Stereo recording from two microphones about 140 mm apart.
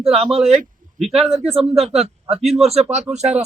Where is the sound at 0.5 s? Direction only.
Centre (ahead or behind).